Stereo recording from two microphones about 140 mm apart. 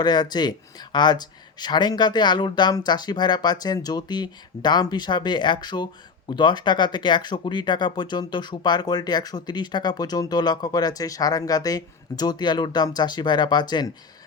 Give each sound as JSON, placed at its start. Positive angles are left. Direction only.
{"t": 0.0, "sound": "speech", "side_deg": 30}